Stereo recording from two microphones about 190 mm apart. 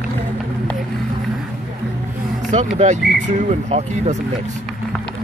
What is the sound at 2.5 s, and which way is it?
Speech, 40° right (ahead or behind).